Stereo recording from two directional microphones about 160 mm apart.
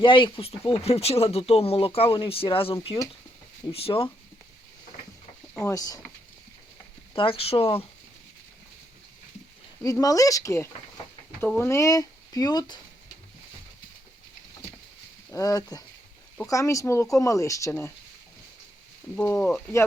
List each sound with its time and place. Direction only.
0.0 s speech: 30° left (ahead or behind)
5.5 s speech: 20° left (ahead or behind)
7.1 s speech: 35° left (ahead or behind)
9.8 s speech: 20° left (ahead or behind)
15.3 s speech: 20° left (ahead or behind)
19.1 s speech: 15° left (ahead or behind)